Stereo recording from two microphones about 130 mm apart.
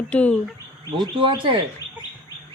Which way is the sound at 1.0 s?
40° right (ahead or behind).